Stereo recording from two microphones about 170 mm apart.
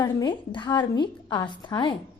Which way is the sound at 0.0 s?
25° left (ahead or behind).